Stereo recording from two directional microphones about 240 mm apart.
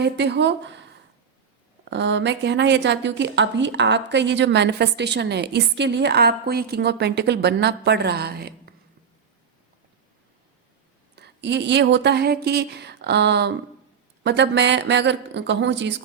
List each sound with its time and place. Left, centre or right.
0.0 s speech: right
11.1 s speech: right